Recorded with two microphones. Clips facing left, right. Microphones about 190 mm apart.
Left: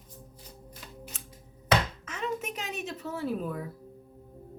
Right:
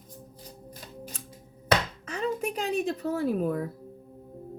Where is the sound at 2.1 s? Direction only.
40° right (ahead or behind).